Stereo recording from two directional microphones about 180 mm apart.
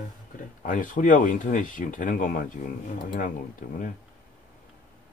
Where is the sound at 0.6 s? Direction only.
50° left (ahead or behind).